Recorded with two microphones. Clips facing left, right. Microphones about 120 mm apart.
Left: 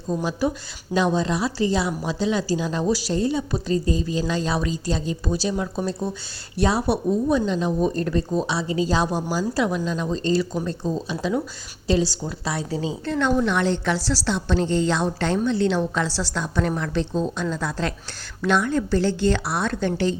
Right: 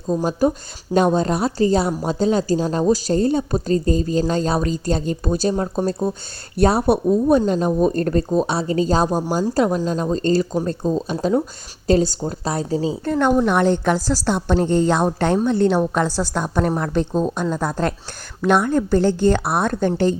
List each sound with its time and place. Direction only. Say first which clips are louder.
0.3 s a woman's voice: right 5 dB; 45° right (ahead or behind)
13.1 s a woman's voice: right 4 dB; 50° right (ahead or behind)